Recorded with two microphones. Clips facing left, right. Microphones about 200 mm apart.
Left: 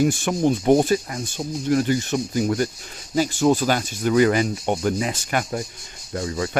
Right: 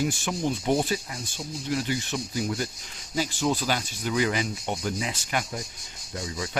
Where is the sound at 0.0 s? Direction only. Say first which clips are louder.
Left 8 dB; 55° left (ahead or behind).